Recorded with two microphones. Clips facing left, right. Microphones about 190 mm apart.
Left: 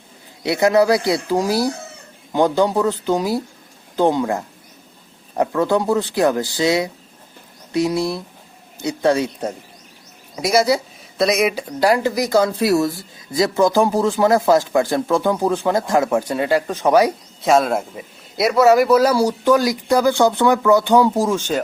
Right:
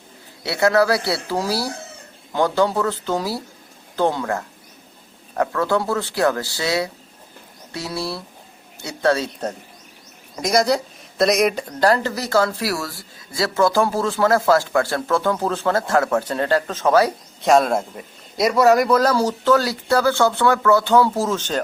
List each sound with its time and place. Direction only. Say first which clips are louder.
0.4 s speech: left 3 dB; 15° left (ahead or behind)
17.4 s speech: even; centre (ahead or behind)